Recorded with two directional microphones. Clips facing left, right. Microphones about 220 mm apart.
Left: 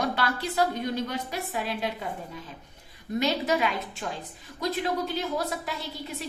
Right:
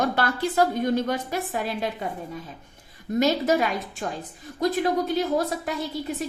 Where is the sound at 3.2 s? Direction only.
45° right (ahead or behind).